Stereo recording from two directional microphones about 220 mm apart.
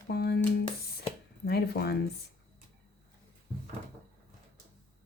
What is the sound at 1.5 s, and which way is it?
Speech, 45° left (ahead or behind).